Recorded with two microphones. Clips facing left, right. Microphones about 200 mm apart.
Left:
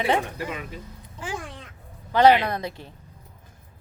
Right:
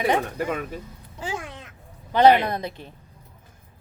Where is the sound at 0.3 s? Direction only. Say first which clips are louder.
Right 5 dB; 50° right (ahead or behind).